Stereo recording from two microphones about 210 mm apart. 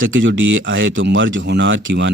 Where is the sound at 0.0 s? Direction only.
65° right (ahead or behind).